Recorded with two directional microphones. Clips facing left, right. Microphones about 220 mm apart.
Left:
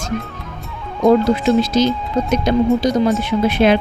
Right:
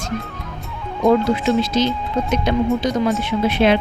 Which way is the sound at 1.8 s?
40° left (ahead or behind).